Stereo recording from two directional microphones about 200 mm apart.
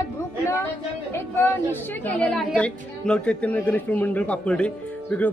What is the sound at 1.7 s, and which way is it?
A woman's voice, 10° left (ahead or behind).